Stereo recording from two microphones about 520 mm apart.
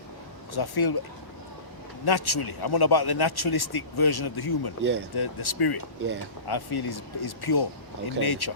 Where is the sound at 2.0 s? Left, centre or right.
Left.